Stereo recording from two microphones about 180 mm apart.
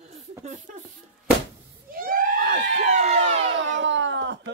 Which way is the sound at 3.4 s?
90° right.